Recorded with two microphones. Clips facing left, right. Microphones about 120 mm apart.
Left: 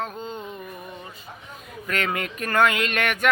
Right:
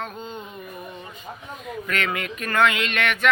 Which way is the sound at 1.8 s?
35° left (ahead or behind).